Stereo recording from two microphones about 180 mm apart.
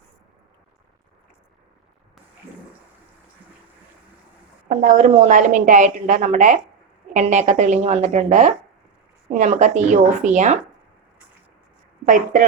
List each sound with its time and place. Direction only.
4.7 s a woman's voice: 40° right (ahead or behind)
12.0 s a woman's voice: 45° right (ahead or behind)